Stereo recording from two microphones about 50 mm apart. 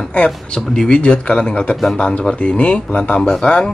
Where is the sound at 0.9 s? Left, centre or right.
Left.